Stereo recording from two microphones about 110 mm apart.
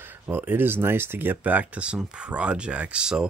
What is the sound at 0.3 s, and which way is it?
Speech, 20° right (ahead or behind).